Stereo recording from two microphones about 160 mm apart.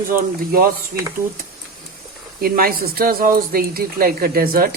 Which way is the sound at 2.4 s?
65° right (ahead or behind).